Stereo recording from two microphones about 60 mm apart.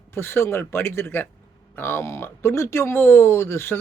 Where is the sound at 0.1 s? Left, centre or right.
Left.